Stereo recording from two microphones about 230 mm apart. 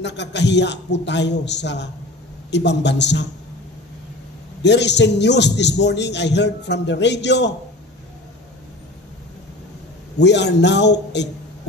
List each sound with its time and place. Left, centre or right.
0.0 s a man's voice: left
4.6 s a man's voice: left
10.1 s a man's voice: left